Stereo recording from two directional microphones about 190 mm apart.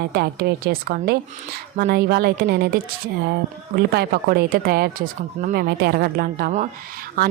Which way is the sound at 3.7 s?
60° right (ahead or behind).